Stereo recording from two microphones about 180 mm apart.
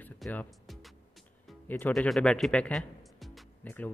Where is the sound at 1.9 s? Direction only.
5° left (ahead or behind).